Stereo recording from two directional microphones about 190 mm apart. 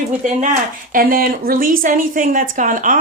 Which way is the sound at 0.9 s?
50° right (ahead or behind).